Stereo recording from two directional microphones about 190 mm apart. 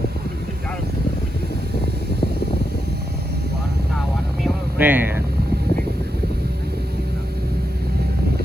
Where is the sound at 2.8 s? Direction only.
60° right (ahead or behind).